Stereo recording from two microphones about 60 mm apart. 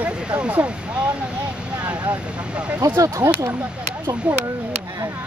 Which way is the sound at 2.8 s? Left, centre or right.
Right.